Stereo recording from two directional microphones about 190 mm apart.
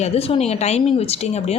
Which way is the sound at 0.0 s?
35° left (ahead or behind).